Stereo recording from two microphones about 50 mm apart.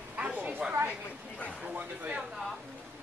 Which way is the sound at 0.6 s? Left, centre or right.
Centre.